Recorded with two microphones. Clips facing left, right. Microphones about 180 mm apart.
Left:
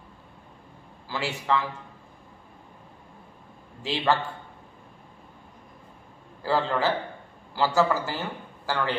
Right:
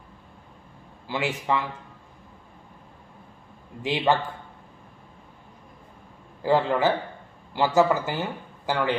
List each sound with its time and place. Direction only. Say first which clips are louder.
1.0 s a man's voice: right 2 dB; 20° right (ahead or behind)
3.8 s a man's voice: right 2 dB; 20° right (ahead or behind)
6.4 s a man's voice: right 4 dB; 20° right (ahead or behind)